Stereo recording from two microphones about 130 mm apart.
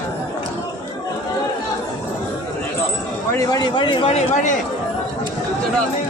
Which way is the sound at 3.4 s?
30° left (ahead or behind).